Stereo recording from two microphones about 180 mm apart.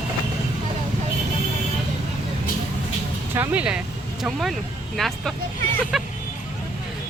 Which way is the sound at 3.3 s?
10° right (ahead or behind).